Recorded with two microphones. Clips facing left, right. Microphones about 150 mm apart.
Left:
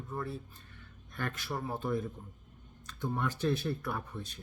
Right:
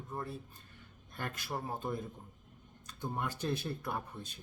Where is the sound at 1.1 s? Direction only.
15° right (ahead or behind).